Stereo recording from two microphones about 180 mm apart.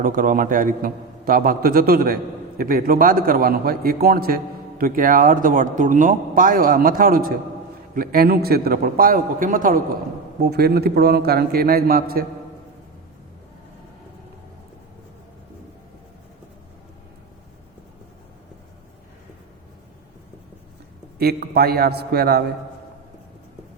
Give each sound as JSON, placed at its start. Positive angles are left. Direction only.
{"t": 0.0, "sound": "a man's voice", "side_deg": -50}
{"t": 10.4, "sound": "a man's voice", "side_deg": -65}
{"t": 21.2, "sound": "a man's voice", "side_deg": -60}